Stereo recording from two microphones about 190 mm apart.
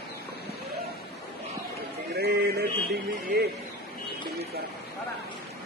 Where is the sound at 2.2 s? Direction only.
55° right (ahead or behind).